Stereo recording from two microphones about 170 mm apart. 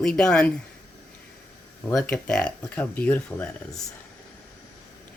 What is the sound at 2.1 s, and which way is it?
Speech, 5° left (ahead or behind).